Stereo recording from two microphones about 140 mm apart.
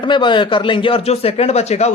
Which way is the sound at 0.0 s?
35° left (ahead or behind).